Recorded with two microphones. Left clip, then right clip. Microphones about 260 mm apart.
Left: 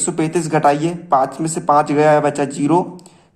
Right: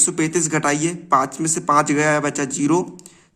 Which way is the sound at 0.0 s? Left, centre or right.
Right.